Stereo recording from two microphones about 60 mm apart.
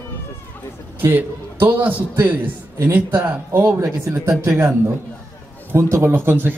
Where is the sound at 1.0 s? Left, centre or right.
Right.